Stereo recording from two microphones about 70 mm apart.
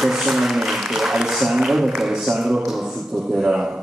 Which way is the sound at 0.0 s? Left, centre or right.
Centre.